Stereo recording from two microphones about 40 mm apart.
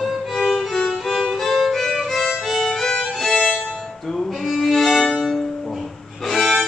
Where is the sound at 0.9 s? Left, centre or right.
Centre.